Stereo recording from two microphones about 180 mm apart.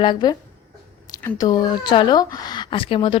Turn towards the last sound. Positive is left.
turn(degrees=30)  # may be behind; listen again after turning